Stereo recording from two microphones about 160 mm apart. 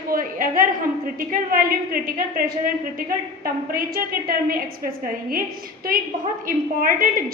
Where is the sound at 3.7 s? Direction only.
65° right (ahead or behind).